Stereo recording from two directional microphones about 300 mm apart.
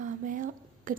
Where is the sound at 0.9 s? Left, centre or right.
Right.